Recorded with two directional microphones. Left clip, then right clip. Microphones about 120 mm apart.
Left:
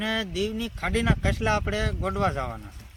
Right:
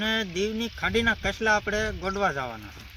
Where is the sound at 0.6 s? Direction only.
15° left (ahead or behind).